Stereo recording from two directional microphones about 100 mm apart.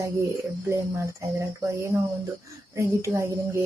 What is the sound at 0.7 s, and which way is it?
Speech, 30° right (ahead or behind).